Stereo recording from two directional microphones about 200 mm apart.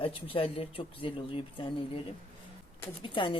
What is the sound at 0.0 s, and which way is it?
Speech, 25° left (ahead or behind).